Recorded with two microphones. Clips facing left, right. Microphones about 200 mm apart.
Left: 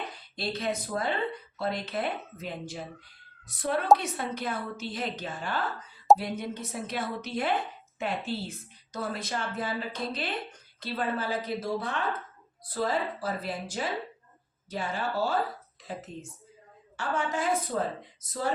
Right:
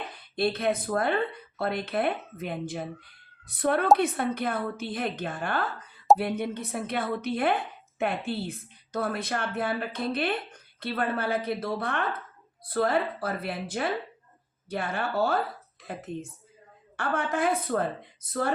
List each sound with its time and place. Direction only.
0.3 s a woman's voice: 55° right (ahead or behind)